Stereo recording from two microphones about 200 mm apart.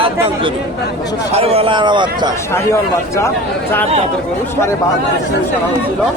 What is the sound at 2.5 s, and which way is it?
Speech, 15° left (ahead or behind).